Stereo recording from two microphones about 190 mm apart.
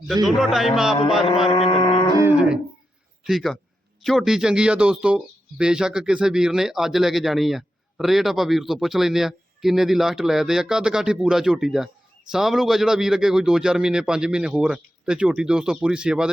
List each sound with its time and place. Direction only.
0.3 s speech: centre (ahead or behind)
1.5 s speech: 30° left (ahead or behind)
3.2 s speech: centre (ahead or behind)